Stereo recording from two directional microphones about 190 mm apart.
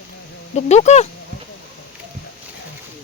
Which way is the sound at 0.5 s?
35° left (ahead or behind).